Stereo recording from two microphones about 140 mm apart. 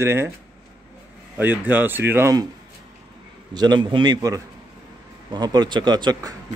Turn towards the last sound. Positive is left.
turn(degrees=-30)  # may be behind; listen again after turning